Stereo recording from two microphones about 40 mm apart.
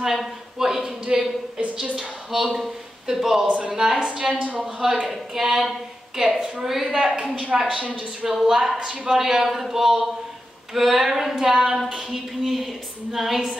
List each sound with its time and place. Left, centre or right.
0.0 s a woman's voice: centre
3.4 s speech: right
3.7 s a woman's voice: centre
4.2 s speech: right
5.0 s a woman's voice: centre
7.5 s speech: right
8.3 s a woman's voice: centre